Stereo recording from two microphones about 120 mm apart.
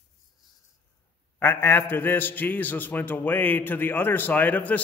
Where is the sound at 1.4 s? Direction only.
15° left (ahead or behind).